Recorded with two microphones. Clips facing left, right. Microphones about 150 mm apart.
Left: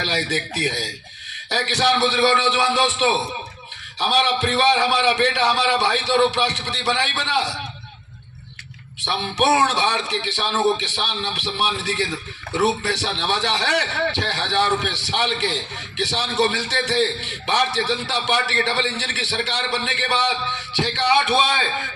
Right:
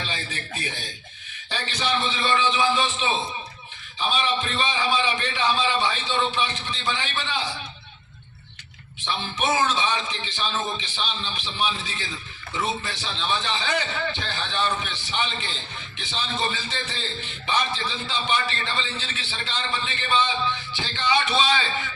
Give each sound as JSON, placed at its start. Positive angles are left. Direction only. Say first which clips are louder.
{"t": 0.0, "sound": "a man's voice", "louder": "left 9 dB", "side_deg": 75}
{"t": 9.0, "sound": "a man's voice", "louder": "left 6 dB", "side_deg": 70}